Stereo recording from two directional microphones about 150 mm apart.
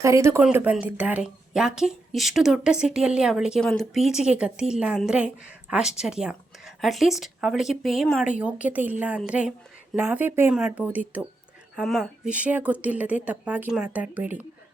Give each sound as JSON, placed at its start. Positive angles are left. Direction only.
{"t": 0.0, "sound": "speech", "side_deg": -20}
{"t": 0.4, "sound": "a woman's voice", "side_deg": -10}
{"t": 11.8, "sound": "a woman's voice", "side_deg": 0}